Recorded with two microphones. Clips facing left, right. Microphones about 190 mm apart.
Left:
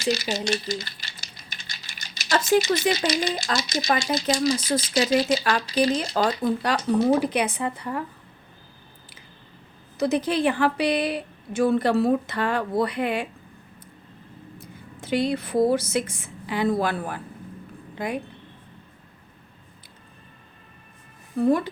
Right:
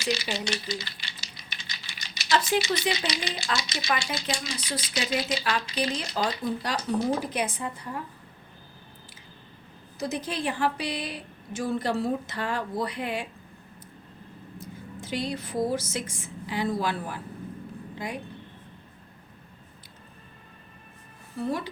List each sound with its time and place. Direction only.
0.0 s speech: 45° left (ahead or behind); by 8.0 s 70° left (ahead or behind)
10.0 s a woman's voice: 65° left (ahead or behind)
14.6 s a woman's voice: 60° left (ahead or behind)
21.3 s speech: 50° left (ahead or behind)